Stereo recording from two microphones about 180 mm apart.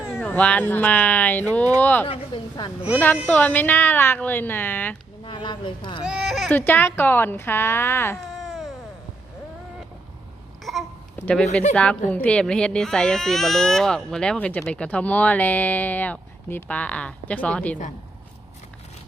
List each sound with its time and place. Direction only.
0.1 s speech: 10° left (ahead or behind)
2.0 s speech: 25° left (ahead or behind)
3.2 s speech: 10° left (ahead or behind)
5.2 s speech: 25° left (ahead or behind)
6.1 s speech: 5° right (ahead or behind)
6.5 s speech: 10° left (ahead or behind)
8.2 s cat: centre (ahead or behind)
10.6 s babbling: centre (ahead or behind)
11.2 s speech: 10° left (ahead or behind)